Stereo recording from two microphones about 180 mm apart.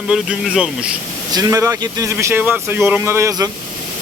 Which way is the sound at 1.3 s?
20° right (ahead or behind).